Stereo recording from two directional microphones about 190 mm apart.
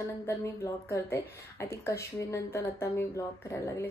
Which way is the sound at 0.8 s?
15° left (ahead or behind).